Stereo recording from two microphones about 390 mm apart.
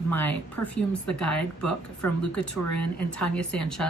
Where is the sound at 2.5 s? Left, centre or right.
Left.